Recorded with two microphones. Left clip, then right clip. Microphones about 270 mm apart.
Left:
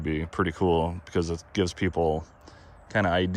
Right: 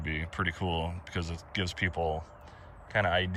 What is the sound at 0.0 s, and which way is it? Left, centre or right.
Speech, centre.